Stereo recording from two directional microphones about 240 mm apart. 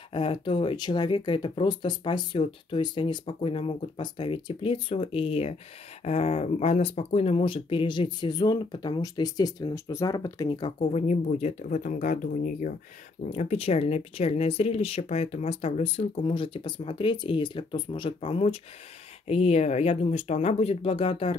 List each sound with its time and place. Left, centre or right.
0.1 s speech: left